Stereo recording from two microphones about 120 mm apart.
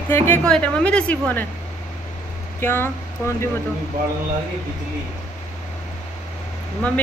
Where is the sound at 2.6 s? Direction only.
20° left (ahead or behind).